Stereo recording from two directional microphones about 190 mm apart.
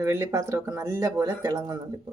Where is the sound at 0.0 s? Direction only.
15° right (ahead or behind).